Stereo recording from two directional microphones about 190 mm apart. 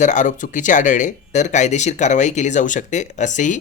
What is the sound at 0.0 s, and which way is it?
Speech, 40° left (ahead or behind).